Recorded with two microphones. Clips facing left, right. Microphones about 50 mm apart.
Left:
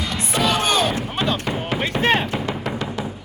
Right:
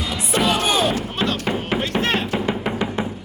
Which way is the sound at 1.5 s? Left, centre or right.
Centre.